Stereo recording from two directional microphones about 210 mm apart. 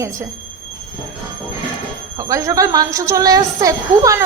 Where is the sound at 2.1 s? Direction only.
15° right (ahead or behind).